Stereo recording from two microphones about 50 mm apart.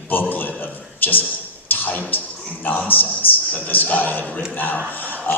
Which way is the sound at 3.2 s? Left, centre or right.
Left.